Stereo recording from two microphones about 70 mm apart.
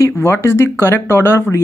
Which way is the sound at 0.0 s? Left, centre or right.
Left.